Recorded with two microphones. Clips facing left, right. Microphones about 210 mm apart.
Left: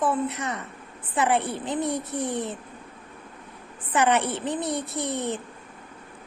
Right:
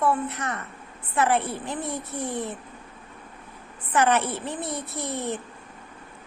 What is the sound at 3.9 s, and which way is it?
Speech, 15° left (ahead or behind).